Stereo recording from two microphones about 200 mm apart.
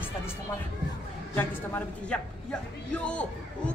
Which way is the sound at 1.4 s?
5° left (ahead or behind).